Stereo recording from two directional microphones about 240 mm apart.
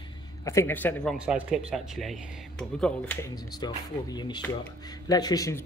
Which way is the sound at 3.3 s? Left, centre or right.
Centre.